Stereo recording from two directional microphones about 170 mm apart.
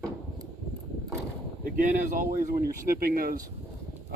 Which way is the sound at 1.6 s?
50° right (ahead or behind).